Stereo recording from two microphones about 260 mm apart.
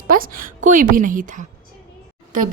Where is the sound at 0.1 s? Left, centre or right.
Right.